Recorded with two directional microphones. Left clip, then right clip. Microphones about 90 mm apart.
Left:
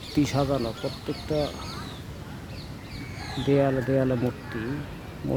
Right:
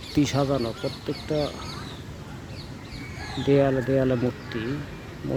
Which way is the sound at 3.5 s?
5° left (ahead or behind).